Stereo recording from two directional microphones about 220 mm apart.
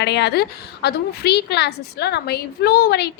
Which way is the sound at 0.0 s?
50° left (ahead or behind).